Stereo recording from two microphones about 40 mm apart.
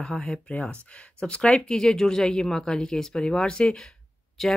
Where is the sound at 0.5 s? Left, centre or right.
Left.